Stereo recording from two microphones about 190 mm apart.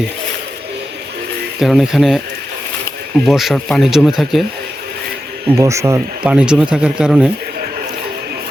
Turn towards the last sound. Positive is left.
turn(degrees=-5)  # may be behind; listen again after turning